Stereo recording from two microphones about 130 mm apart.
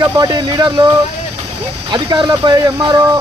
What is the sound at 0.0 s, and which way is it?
Speech, 30° right (ahead or behind).